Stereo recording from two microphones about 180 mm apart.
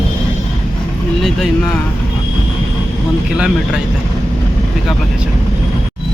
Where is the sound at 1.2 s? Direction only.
5° left (ahead or behind).